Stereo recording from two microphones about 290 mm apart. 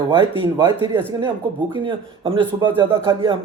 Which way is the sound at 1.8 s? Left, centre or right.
Centre.